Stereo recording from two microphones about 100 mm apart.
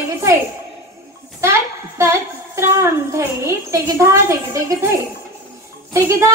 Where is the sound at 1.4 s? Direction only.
30° right (ahead or behind).